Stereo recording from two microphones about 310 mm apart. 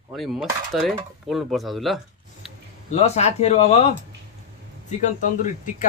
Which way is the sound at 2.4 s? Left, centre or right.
Centre.